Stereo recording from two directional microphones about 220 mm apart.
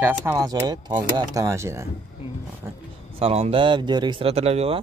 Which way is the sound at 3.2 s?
25° right (ahead or behind).